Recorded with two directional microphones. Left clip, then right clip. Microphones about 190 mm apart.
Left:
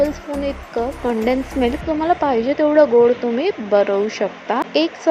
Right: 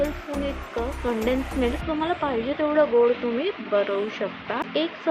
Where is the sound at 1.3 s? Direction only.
30° left (ahead or behind).